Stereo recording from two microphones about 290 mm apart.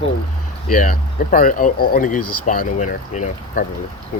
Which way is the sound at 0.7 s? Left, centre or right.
Left.